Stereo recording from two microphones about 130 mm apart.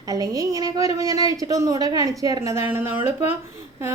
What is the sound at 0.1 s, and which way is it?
A woman's voice, 25° right (ahead or behind).